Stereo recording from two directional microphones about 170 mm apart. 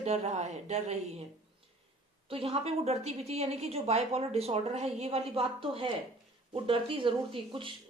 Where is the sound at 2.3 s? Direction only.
35° right (ahead or behind).